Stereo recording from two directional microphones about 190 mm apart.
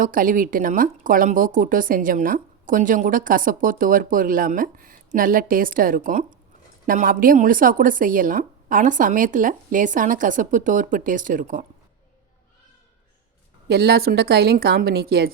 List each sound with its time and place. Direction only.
0.0 s speech: 45° right (ahead or behind)
13.7 s a woman's voice: 55° right (ahead or behind)